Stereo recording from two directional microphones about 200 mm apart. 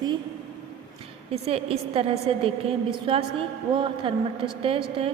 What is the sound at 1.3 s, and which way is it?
A woman's voice, 30° right (ahead or behind).